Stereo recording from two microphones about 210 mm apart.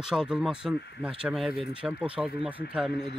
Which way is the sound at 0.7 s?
50° left (ahead or behind).